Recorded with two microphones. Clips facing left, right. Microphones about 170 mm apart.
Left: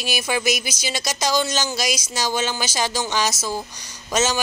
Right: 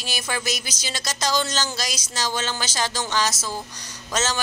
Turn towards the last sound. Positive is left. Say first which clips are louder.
# left 4 dB
turn(degrees=15)  # may be behind; listen again after turning